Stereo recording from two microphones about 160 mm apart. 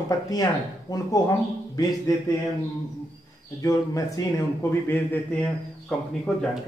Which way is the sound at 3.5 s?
20° left (ahead or behind).